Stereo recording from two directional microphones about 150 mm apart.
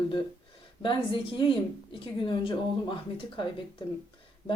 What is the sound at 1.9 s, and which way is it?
Speech, 35° left (ahead or behind).